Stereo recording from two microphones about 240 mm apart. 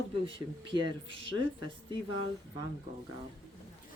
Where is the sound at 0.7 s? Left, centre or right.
Right.